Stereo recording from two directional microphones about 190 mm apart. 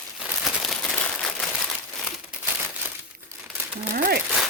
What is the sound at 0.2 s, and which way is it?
Crumpling, 5° right (ahead or behind).